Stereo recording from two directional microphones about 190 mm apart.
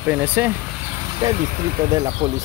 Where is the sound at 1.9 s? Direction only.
20° right (ahead or behind).